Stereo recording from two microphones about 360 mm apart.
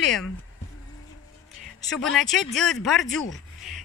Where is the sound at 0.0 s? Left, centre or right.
Centre.